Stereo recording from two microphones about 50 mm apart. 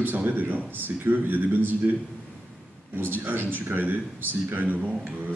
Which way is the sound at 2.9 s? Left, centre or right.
Right.